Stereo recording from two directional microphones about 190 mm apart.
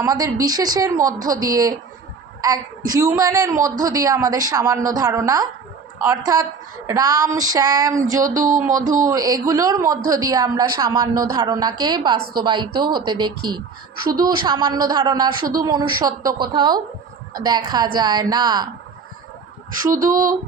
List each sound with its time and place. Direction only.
0.0 s a woman's voice: 15° right (ahead or behind)
8.4 s speech: 45° right (ahead or behind)
9.0 s a woman's voice: 20° right (ahead or behind)